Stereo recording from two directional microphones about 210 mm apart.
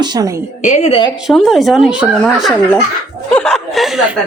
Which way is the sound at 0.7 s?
35° left (ahead or behind).